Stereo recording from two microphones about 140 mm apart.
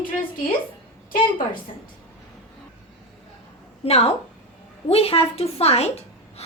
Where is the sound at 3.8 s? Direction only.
45° left (ahead or behind).